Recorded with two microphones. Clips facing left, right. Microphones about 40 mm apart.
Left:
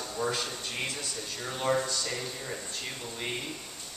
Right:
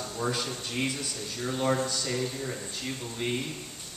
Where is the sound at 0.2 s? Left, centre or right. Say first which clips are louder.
Even; centre.